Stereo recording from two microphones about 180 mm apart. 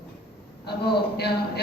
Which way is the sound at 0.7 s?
65° left (ahead or behind).